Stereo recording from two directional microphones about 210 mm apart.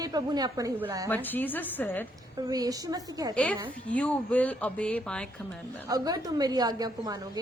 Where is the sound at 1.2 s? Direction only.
10° left (ahead or behind).